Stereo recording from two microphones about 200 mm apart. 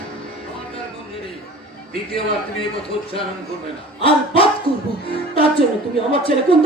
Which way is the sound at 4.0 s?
25° left (ahead or behind).